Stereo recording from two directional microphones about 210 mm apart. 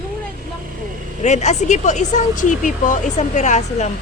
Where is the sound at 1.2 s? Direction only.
35° left (ahead or behind).